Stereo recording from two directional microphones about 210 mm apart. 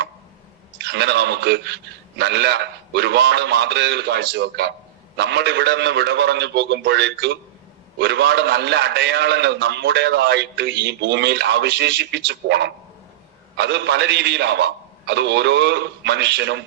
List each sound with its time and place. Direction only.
0.8 s a man's voice: 55° right (ahead or behind)